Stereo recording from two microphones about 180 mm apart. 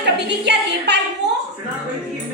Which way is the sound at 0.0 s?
70° right (ahead or behind).